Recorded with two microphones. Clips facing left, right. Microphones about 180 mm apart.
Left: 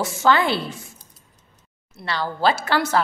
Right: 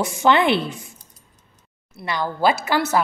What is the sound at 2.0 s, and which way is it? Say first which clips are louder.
Speech: right 1 dB; 15° right (ahead or behind).